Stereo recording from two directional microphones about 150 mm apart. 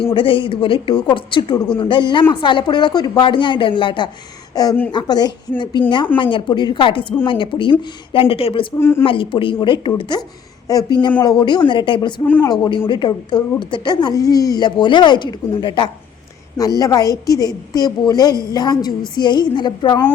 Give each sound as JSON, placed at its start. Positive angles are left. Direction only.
{"t": 0.0, "sound": "a woman's voice", "side_deg": 35}
{"t": 8.8, "sound": "speech", "side_deg": 15}
{"t": 9.0, "sound": "a woman's voice", "side_deg": 35}
{"t": 12.2, "sound": "speech", "side_deg": 10}
{"t": 12.5, "sound": "a woman's voice", "side_deg": 30}